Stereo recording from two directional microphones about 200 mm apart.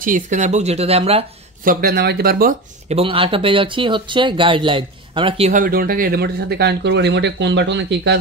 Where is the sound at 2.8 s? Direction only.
30° right (ahead or behind).